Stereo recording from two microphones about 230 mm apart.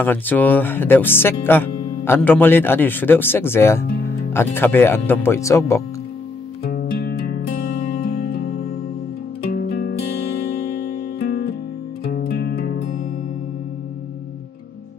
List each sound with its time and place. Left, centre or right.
0.0 s speech: centre
6.6 s music: left
12.1 s music: left